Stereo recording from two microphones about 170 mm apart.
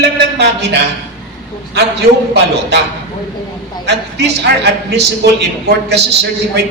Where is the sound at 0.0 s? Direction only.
80° right.